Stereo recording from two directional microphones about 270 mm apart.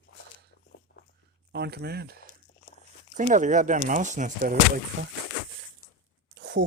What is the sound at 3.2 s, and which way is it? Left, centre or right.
Speech, right.